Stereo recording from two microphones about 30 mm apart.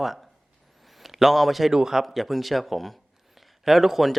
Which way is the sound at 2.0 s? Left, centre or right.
Centre.